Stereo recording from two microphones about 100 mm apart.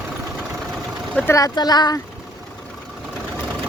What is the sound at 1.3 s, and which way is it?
Speech, 35° left (ahead or behind).